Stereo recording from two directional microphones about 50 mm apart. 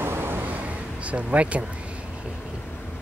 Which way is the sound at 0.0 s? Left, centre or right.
Right.